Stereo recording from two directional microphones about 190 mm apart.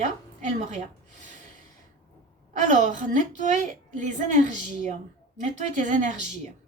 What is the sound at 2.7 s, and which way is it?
A woman's voice, 40° right (ahead or behind).